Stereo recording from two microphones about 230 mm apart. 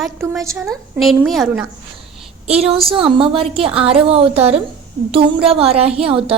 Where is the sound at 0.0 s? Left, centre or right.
Centre.